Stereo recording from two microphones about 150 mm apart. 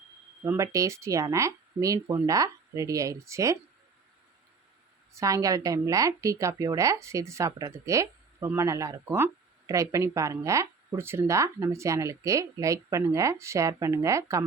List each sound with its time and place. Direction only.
0.4 s speech: 20° right (ahead or behind)
5.1 s speech: 20° right (ahead or behind)